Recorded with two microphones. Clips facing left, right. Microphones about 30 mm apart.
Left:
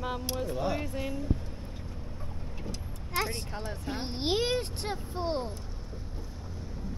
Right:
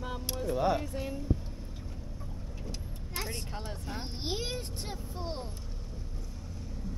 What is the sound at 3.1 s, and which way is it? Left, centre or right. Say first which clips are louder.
Speech: left 7 dB; left.